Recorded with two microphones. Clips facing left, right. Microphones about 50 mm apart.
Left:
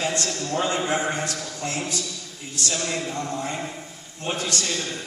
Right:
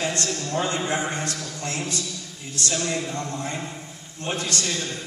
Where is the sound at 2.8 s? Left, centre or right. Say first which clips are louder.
Right 1 dB; centre.